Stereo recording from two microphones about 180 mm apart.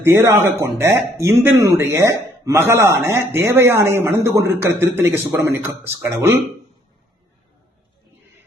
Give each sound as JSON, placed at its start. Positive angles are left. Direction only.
{"t": 0.0, "sound": "a man's voice", "side_deg": -15}